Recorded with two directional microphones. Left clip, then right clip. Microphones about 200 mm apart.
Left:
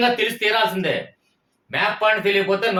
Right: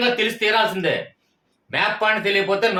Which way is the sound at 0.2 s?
20° right (ahead or behind).